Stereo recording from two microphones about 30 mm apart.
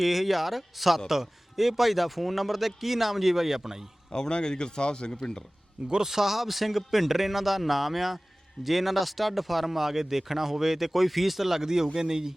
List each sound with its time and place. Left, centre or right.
0.0 s speech: centre
4.3 s speech: left
5.9 s speech: centre
11.6 s speech: centre